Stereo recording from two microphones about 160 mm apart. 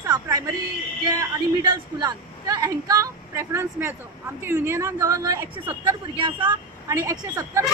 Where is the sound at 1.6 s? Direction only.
25° right (ahead or behind).